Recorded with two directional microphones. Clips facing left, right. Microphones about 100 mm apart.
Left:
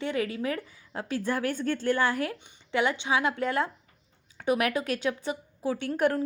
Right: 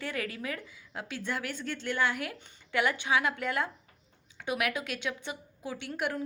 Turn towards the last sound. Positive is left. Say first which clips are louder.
# left 8 dB
turn(degrees=45)  # may be behind; listen again after turning